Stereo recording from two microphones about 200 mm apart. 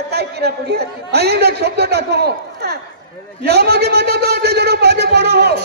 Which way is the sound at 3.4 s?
55° right (ahead or behind).